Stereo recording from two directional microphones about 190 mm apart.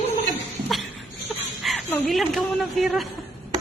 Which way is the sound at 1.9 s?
10° left (ahead or behind).